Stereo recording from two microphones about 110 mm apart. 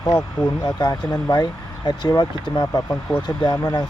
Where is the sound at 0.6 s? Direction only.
40° left (ahead or behind).